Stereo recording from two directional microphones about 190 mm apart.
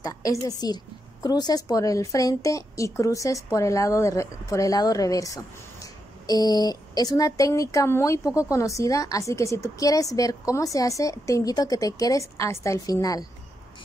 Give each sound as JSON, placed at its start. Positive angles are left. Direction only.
{"t": 0.0, "sound": "a woman's voice", "side_deg": 20}